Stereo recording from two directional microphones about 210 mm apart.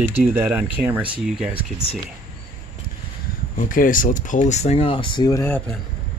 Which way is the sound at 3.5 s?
40° left (ahead or behind).